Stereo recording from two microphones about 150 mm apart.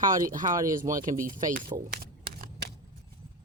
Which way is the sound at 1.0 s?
60° right (ahead or behind).